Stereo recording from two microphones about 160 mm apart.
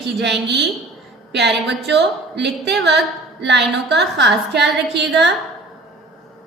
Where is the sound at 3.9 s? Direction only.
90° right.